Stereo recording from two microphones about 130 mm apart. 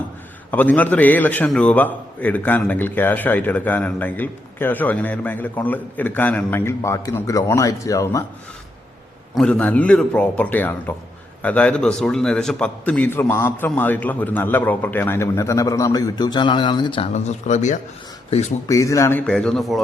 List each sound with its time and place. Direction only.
0.5 s a man's voice: 15° left (ahead or behind)
9.3 s a man's voice: 5° left (ahead or behind); by 17.1 s 40° left (ahead or behind)
17.1 s speech: 60° left (ahead or behind)
18.3 s speech: 55° left (ahead or behind)
18.7 s a man's voice: 25° left (ahead or behind)
19.2 s a man's voice: 5° left (ahead or behind)